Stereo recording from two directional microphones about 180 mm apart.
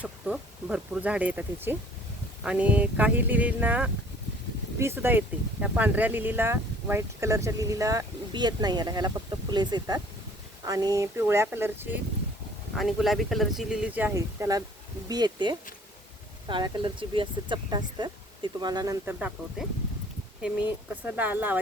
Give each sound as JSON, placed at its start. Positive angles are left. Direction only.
{"t": 0.0, "sound": "speech", "side_deg": -5}
{"t": 12.7, "sound": "speech", "side_deg": 0}
{"t": 20.9, "sound": "speech", "side_deg": -10}